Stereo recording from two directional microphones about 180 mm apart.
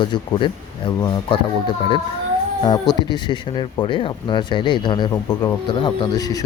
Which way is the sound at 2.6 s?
25° left (ahead or behind).